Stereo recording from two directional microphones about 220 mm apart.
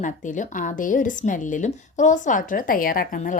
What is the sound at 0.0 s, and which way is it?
A woman's voice, 35° left (ahead or behind).